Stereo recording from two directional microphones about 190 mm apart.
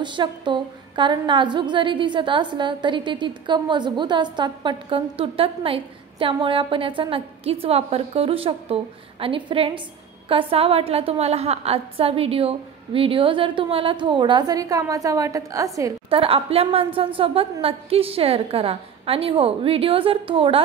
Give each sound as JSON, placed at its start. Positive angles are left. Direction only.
{"t": 0.0, "sound": "a woman's voice", "side_deg": -25}
{"t": 16.1, "sound": "a woman's voice", "side_deg": -30}